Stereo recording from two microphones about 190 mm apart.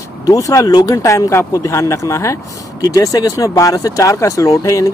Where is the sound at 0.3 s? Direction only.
15° left (ahead or behind).